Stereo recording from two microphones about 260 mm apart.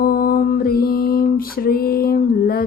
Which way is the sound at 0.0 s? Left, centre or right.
Left.